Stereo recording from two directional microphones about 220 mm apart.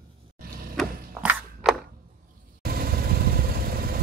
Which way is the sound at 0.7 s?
5° right (ahead or behind).